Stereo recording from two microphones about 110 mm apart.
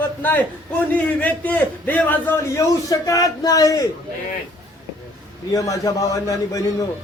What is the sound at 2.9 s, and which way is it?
Speech, 30° left (ahead or behind).